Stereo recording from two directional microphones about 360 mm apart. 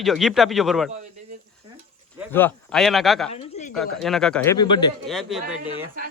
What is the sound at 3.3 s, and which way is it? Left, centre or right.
Speech, centre.